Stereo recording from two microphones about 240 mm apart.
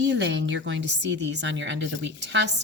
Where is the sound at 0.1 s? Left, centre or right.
Right.